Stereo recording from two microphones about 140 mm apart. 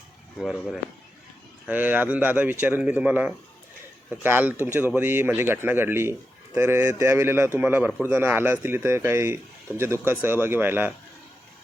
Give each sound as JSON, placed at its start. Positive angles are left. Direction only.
{"t": 0.3, "sound": "speech", "side_deg": 0}
{"t": 1.6, "sound": "a man's voice", "side_deg": -10}